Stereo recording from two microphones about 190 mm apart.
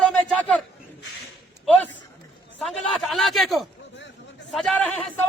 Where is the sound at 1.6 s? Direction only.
5° left (ahead or behind).